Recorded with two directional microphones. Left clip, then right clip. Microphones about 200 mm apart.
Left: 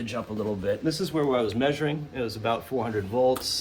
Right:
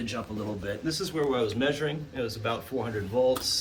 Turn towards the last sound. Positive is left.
turn(degrees=40)  # may be behind; listen again after turning